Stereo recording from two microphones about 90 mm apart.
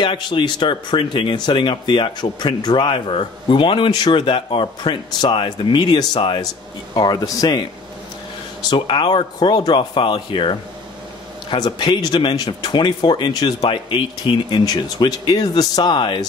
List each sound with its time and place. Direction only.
0.0 s speech: 65° left (ahead or behind)
3.9 s speech: 60° left (ahead or behind)
8.6 s speech: 70° left (ahead or behind)
11.5 s speech: 55° left (ahead or behind)